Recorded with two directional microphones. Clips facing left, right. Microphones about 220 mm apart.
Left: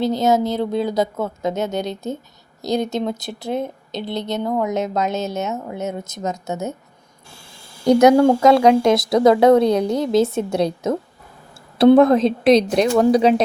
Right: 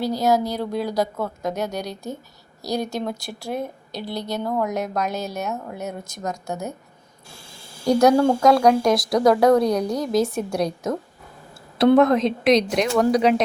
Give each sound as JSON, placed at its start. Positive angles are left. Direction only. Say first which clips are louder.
{"t": 0.0, "sound": "a woman's voice", "louder": "left 3 dB", "side_deg": 20}
{"t": 7.9, "sound": "a woman's voice", "louder": "left 4 dB", "side_deg": 20}